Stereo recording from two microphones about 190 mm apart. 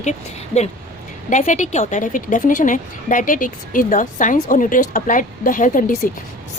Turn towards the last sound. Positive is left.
turn(degrees=45)  # may be behind; listen again after turning